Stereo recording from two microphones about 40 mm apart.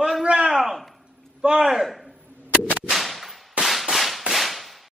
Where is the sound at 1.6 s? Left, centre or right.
Centre.